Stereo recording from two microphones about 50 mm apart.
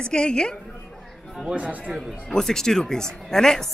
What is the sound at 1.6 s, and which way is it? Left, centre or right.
Speech, right.